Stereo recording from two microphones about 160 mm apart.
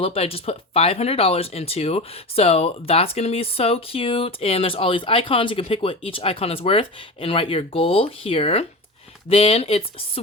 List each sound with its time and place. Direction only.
0.0 s speech: 35° left (ahead or behind)